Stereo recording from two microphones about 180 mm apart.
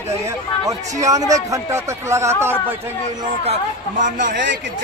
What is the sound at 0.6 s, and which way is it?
A man's voice, 20° right (ahead or behind).